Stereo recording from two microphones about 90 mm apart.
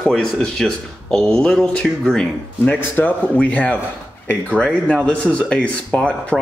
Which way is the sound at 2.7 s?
20° left (ahead or behind).